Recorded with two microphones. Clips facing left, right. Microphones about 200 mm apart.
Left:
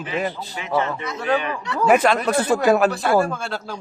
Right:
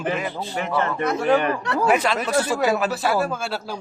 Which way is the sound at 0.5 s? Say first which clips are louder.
Right 1 dB; 55° right (ahead or behind).